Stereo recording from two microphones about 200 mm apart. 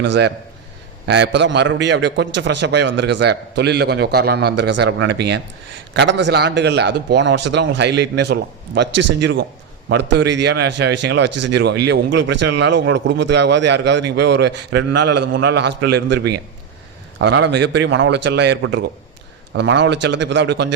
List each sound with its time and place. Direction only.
0.0 s a man's voice: 60° right (ahead or behind)